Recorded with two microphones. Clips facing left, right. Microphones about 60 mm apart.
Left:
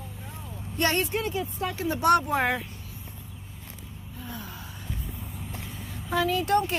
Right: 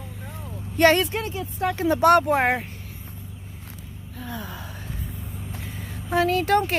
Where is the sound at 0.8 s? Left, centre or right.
Right.